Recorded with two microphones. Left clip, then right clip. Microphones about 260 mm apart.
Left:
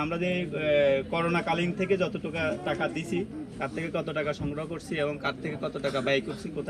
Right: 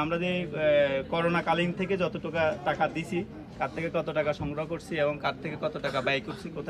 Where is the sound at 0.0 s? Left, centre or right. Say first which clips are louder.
Even; centre.